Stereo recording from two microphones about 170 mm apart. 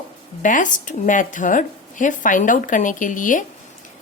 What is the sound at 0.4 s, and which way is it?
A woman's voice, 50° left (ahead or behind).